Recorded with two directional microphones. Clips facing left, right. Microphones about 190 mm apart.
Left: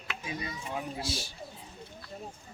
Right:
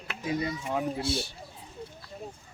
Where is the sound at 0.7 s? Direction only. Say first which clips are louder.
Right 6 dB; 60° right (ahead or behind).